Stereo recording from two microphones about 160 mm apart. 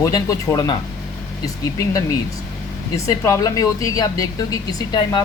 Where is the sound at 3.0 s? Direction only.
20° left (ahead or behind).